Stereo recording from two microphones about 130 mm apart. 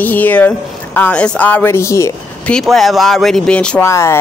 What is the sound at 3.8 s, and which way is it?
Speech, 20° left (ahead or behind).